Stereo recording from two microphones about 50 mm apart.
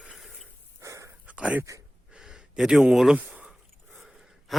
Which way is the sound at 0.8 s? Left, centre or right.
Right.